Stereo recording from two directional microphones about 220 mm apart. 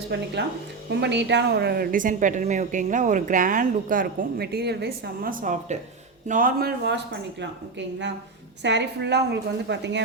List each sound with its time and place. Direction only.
0.1 s a woman's voice: 50° right (ahead or behind)
8.6 s a woman's voice: 50° right (ahead or behind)